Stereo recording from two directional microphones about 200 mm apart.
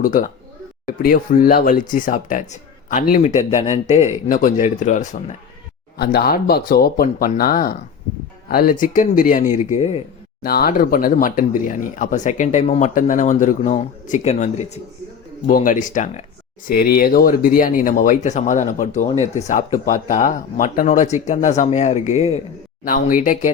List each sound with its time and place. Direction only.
0.0 s speech: 40° left (ahead or behind)
6.0 s speech: 50° left (ahead or behind); by 10.0 s 35° left (ahead or behind)
10.4 s speech: 50° left (ahead or behind)
16.6 s speech: 50° left (ahead or behind)